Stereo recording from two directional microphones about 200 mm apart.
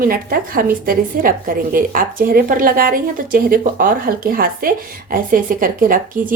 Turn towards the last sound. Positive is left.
turn(degrees=-45)  # may be behind; listen again after turning